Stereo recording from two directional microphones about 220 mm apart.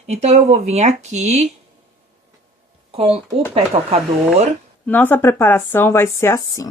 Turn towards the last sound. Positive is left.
turn(degrees=15)  # may be behind; listen again after turning